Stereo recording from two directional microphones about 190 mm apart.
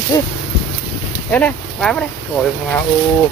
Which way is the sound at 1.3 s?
5° left (ahead or behind).